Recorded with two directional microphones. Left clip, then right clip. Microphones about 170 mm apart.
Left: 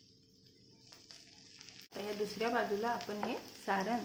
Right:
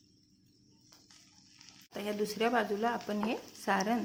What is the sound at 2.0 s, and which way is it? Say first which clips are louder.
Speech: right 5 dB; 50° right (ahead or behind).